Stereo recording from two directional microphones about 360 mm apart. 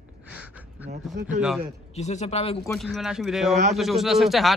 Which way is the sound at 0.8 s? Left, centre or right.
Centre.